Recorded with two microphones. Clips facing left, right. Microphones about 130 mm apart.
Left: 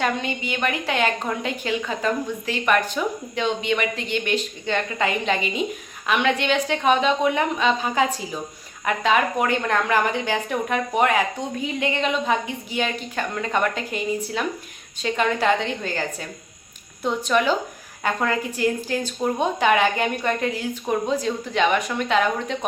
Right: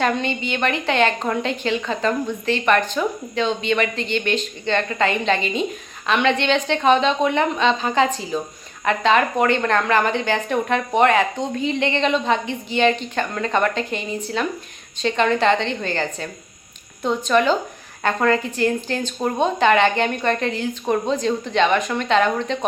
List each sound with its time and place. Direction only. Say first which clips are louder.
0.0 s a woman's voice: right 3 dB; 10° left (ahead or behind)